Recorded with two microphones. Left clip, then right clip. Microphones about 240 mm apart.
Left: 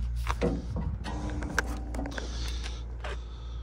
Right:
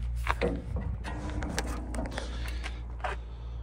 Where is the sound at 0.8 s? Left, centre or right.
Centre.